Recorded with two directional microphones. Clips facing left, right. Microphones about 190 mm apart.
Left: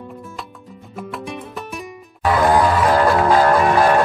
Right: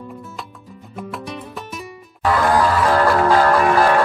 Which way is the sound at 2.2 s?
20° left (ahead or behind).